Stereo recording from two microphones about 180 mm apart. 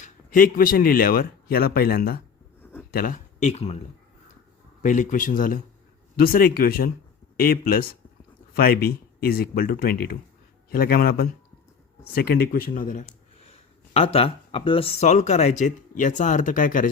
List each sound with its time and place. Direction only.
0.0 s speech: 50° left (ahead or behind)
4.8 s speech: 45° left (ahead or behind)